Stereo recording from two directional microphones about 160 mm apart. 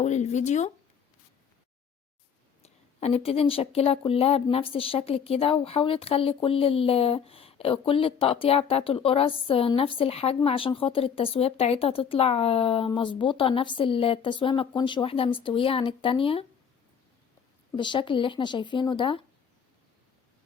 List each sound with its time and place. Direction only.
0.0 s speech: 45° left (ahead or behind)
2.6 s speech: 40° left (ahead or behind)
17.7 s speech: 30° left (ahead or behind)